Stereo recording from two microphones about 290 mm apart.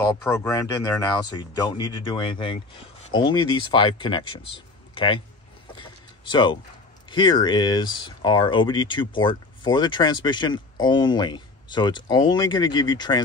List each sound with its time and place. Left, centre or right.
0.1 s speech: centre
5.8 s a sound: centre
7.1 s speech: centre